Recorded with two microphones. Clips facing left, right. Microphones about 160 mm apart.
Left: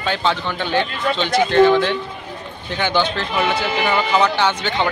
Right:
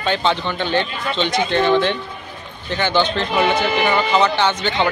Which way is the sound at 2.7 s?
10° left (ahead or behind).